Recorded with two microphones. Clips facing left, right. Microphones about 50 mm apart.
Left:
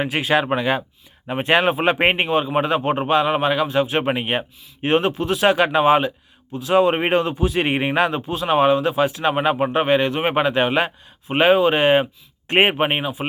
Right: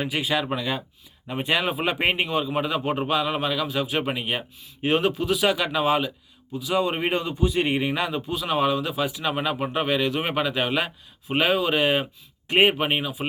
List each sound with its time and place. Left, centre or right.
0.1 s speech: left
7.9 s speech: left
12.7 s speech: left